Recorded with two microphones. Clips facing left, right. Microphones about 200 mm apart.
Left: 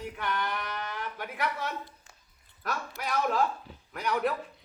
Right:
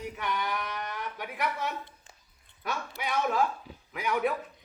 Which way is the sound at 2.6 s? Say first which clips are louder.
Even; centre (ahead or behind).